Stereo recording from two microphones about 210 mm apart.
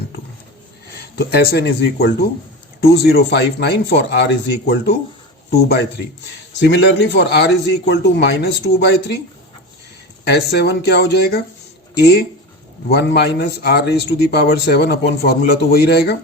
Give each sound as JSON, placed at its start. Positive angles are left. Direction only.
{"t": 1.1, "sound": "a man's voice", "side_deg": 50}
{"t": 10.2, "sound": "a man's voice", "side_deg": 50}